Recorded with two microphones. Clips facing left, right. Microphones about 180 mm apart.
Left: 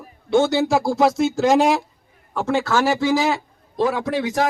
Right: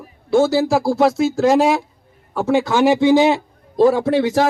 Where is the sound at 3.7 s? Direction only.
35° right (ahead or behind).